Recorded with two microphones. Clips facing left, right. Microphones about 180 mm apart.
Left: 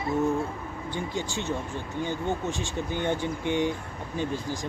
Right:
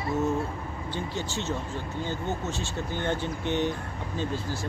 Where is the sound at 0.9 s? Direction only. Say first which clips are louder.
Left 1 dB; 15° left (ahead or behind).